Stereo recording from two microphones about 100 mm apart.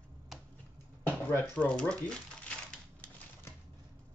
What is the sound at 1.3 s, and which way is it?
Crumpling, 15° left (ahead or behind).